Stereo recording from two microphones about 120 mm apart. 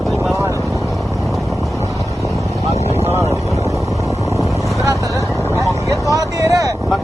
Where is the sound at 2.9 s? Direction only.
20° right (ahead or behind).